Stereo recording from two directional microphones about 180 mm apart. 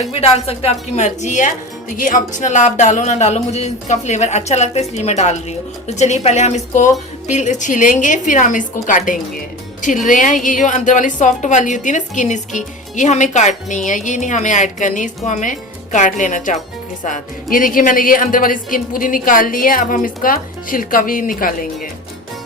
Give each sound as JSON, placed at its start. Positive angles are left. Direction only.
{"t": 0.0, "sound": "a woman's voice", "side_deg": 35}